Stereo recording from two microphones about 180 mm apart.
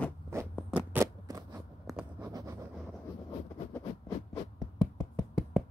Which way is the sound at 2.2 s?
15° right (ahead or behind).